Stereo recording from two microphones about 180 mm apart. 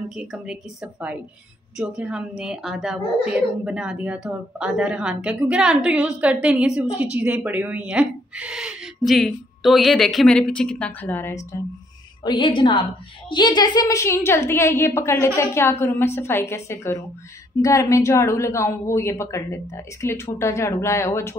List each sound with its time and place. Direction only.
0.1 s a woman's voice: 5° right (ahead or behind)
1.8 s a woman's voice: 5° right (ahead or behind); by 11.6 s 15° left (ahead or behind)
12.3 s a woman's voice: 30° left (ahead or behind)